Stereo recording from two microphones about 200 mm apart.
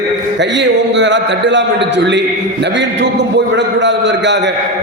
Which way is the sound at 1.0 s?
65° right (ahead or behind).